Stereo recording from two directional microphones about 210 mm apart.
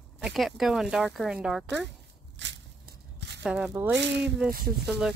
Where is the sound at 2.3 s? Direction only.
60° right (ahead or behind).